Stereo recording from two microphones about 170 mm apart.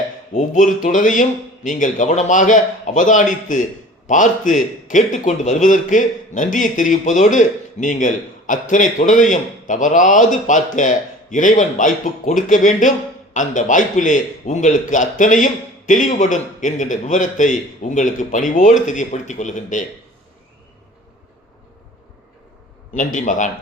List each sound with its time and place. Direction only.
0.3 s speech: 50° left (ahead or behind)
23.0 s speech: 50° left (ahead or behind)